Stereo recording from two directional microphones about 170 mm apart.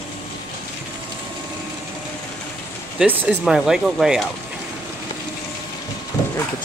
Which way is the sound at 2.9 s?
10° right (ahead or behind).